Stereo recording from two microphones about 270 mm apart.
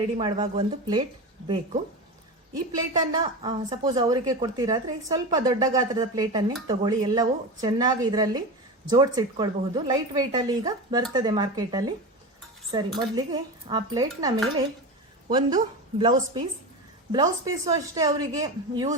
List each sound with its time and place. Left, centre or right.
0.2 s a woman's voice: centre
2.7 s a woman's voice: centre